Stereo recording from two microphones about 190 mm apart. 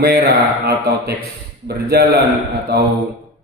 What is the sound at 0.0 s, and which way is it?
Speech, 55° right (ahead or behind).